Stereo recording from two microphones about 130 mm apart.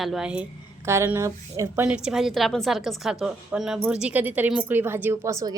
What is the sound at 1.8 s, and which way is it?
A woman's voice, 5° right (ahead or behind).